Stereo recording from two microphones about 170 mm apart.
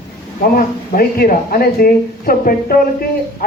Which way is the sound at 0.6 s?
60° left (ahead or behind).